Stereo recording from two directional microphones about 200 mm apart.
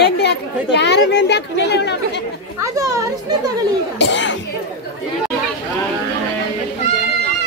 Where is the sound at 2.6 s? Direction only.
15° right (ahead or behind).